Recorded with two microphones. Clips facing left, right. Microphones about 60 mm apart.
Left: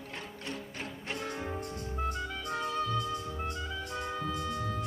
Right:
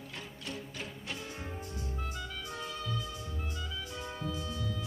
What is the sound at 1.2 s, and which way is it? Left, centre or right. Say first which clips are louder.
Music: left 6 dB; left.